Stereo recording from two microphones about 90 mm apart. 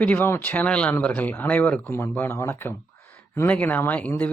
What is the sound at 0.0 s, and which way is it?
A man's voice, 15° left (ahead or behind).